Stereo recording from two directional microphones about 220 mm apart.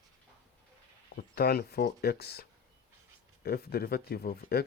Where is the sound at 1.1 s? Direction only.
45° left (ahead or behind).